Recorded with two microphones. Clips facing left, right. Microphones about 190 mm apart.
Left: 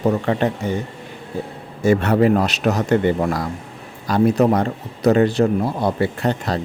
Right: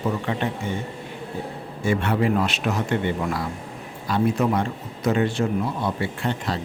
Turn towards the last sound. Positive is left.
turn(degrees=40)  # may be behind; listen again after turning